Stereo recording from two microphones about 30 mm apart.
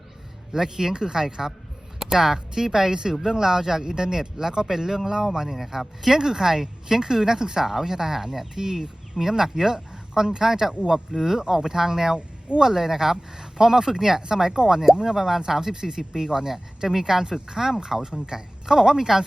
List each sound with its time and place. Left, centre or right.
0.5 s speech: centre
6.1 s speech: centre